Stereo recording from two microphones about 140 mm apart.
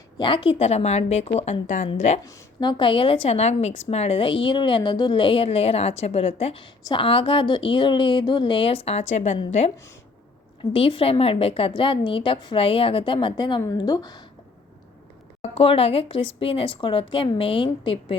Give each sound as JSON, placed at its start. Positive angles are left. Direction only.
{"t": 0.2, "sound": "a woman's voice", "side_deg": 40}
{"t": 2.2, "sound": "a woman's voice", "side_deg": 30}
{"t": 10.6, "sound": "a woman's voice", "side_deg": 40}
{"t": 15.4, "sound": "a woman's voice", "side_deg": 45}